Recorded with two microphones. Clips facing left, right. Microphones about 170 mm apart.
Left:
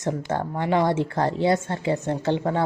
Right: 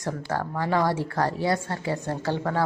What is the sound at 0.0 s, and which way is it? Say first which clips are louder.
A woman's voice: left 3 dB; 20° left (ahead or behind).